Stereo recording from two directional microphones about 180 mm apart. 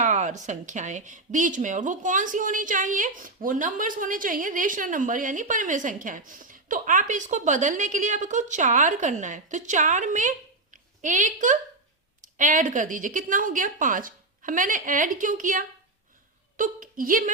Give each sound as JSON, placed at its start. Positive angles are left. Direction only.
{"t": 0.0, "sound": "a woman's voice", "side_deg": -45}